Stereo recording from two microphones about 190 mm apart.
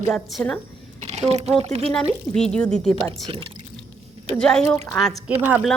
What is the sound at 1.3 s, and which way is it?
Speech, 35° right (ahead or behind).